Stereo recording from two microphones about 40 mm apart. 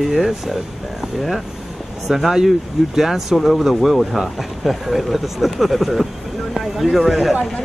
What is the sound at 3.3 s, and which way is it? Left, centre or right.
Speech, centre.